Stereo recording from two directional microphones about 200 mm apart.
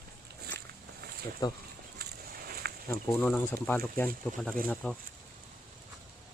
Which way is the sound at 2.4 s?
50° right (ahead or behind).